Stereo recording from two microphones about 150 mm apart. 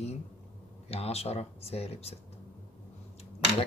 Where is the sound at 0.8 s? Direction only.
45° left (ahead or behind).